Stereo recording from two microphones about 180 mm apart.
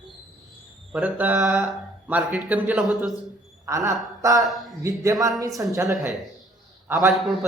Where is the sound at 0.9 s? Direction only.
10° right (ahead or behind).